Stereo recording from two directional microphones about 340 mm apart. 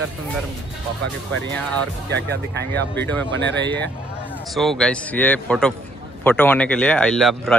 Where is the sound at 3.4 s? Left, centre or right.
Right.